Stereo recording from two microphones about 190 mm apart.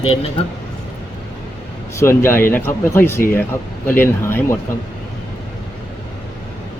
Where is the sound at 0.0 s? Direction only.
30° left (ahead or behind).